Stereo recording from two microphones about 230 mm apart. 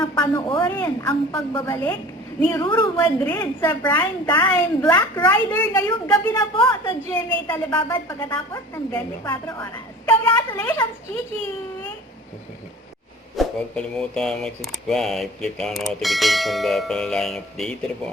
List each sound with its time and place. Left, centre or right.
0.0 s a man's voice: centre
3.0 s a woman's voice: centre
7.1 s a woman's voice: centre
13.3 s speech: centre